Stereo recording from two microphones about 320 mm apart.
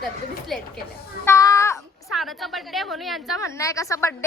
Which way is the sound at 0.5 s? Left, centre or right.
Centre.